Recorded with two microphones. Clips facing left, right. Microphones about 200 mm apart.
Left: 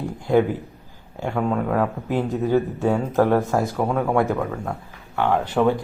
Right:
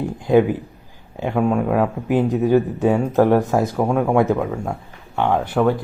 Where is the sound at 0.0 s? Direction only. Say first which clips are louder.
Right 3 dB; 15° right (ahead or behind).